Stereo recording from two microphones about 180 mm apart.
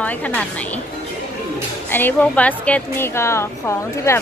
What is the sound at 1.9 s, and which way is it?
A woman's voice, 10° left (ahead or behind).